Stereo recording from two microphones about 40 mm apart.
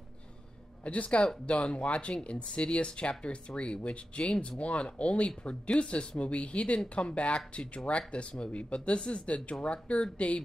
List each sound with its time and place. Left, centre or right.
0.8 s speech: left
6.8 s speech: left